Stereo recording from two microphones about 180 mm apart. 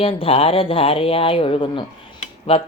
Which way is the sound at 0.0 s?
30° left (ahead or behind).